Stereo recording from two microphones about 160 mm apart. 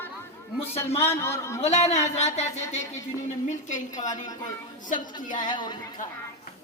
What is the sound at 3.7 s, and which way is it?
A woman's voice, 50° left (ahead or behind).